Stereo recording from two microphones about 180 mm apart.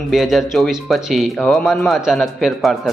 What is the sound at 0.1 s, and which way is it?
A man's voice, centre (ahead or behind).